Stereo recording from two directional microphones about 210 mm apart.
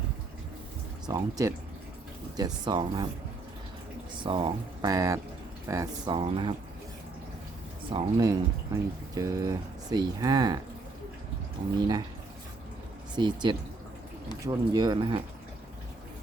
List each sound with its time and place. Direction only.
1.0 s speech: 15° right (ahead or behind)
4.2 s speech: 25° right (ahead or behind)
6.1 s speech: 25° right (ahead or behind)
7.9 s speech: 15° right (ahead or behind)
11.8 s speech: 20° right (ahead or behind)
13.1 s speech: 20° right (ahead or behind)